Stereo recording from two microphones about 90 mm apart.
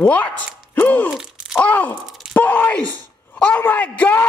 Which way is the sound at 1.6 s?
15° left (ahead or behind).